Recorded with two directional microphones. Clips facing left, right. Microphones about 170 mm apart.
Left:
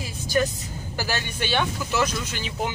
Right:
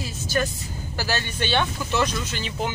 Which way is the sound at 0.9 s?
15° left (ahead or behind).